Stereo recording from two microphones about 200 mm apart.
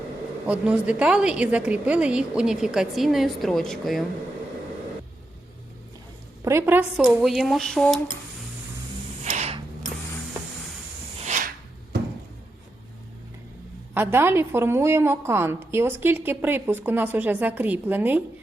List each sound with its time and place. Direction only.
0.4 s a woman's voice: 5° right (ahead or behind)
6.4 s a woman's voice: 10° right (ahead or behind)
9.2 s a sound: 30° right (ahead or behind)
11.2 s rub: 40° right (ahead or behind)
13.9 s a woman's voice: 10° right (ahead or behind)